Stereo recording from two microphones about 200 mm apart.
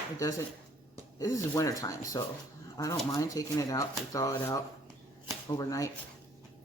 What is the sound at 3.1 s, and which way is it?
Speech, 15° left (ahead or behind).